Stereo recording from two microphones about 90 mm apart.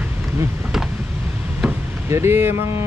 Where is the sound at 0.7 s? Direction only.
5° right (ahead or behind).